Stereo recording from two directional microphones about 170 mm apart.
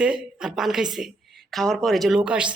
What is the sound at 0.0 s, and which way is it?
A woman's voice, 5° right (ahead or behind).